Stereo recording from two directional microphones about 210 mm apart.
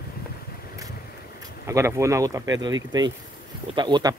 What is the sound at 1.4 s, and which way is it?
Speech, 15° right (ahead or behind).